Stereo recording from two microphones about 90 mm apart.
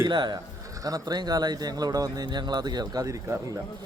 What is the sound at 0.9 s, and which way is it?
Speech, 45° right (ahead or behind).